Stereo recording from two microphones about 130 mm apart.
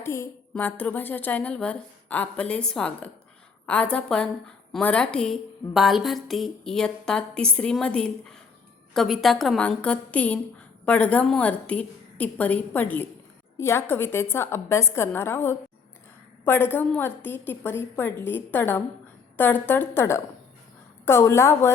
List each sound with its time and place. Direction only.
0.0 s a woman's voice: 20° left (ahead or behind)
0.5 s a woman's voice: 10° left (ahead or behind)